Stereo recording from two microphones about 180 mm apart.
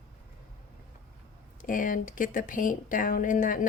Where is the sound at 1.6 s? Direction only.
50° left (ahead or behind).